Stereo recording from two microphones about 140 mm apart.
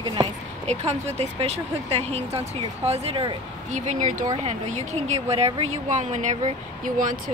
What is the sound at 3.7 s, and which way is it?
A woman's voice, 60° right (ahead or behind).